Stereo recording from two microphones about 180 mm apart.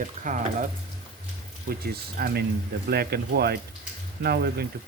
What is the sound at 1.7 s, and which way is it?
Speech, 55° right (ahead or behind).